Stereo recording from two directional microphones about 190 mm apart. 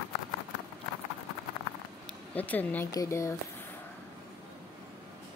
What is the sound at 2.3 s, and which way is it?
Speech, 10° left (ahead or behind).